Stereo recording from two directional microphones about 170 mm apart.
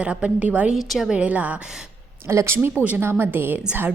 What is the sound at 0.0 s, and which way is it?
A woman's voice, 5° right (ahead or behind).